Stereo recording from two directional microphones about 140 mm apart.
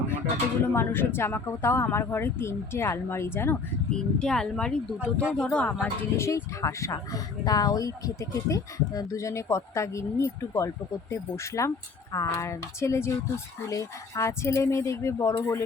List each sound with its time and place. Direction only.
0.7 s speech: 15° left (ahead or behind)
3.8 s speech: 5° left (ahead or behind)
5.8 s speech: 20° left (ahead or behind)